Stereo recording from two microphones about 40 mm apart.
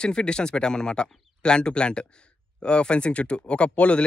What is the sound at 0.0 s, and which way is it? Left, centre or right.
Speech, left.